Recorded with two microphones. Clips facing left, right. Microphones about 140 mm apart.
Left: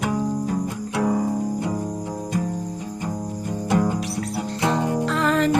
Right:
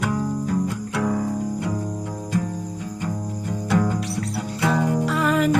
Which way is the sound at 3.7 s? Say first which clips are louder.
Even; 25° left (ahead or behind).